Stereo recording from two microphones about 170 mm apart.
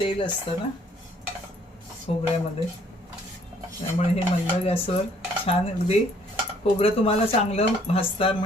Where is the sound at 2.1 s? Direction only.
35° left (ahead or behind).